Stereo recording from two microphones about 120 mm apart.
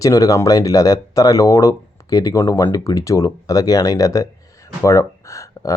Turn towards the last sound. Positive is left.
turn(degrees=25)  # may be behind; listen again after turning